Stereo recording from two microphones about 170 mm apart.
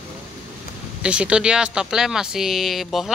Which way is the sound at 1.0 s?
5° right (ahead or behind).